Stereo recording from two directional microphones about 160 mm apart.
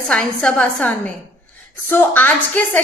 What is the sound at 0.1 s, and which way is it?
A woman's voice, 5° left (ahead or behind).